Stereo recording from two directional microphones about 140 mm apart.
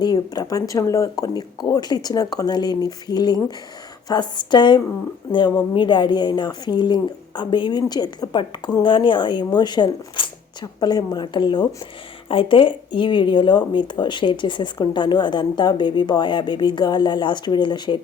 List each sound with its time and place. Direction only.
0.0 s speech: 25° left (ahead or behind)